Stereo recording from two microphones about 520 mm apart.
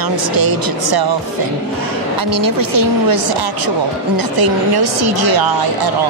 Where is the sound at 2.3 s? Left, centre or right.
Right.